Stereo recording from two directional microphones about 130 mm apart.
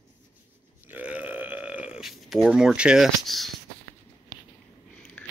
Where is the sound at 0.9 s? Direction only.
10° right (ahead or behind).